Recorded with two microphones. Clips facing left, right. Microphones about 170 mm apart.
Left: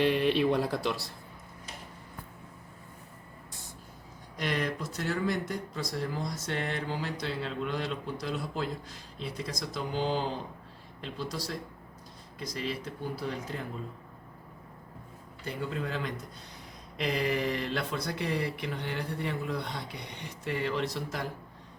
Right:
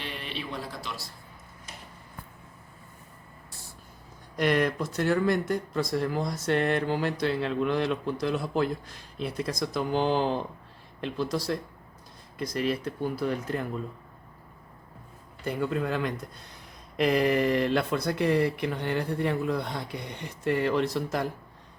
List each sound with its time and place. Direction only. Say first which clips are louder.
0.1 s speech: left 11 dB; 55° left (ahead or behind)
4.4 s speech: right 7 dB; 60° right (ahead or behind)
15.4 s speech: right 6 dB; 55° right (ahead or behind)